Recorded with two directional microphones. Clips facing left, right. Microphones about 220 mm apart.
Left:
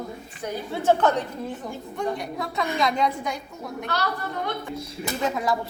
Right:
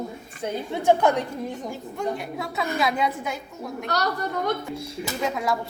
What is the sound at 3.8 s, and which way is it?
Speech, 40° right (ahead or behind).